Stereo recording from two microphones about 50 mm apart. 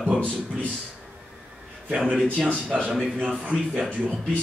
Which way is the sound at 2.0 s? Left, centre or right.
Centre.